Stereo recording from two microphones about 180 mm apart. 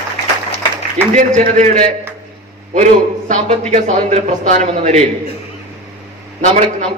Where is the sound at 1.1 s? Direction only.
40° right (ahead or behind).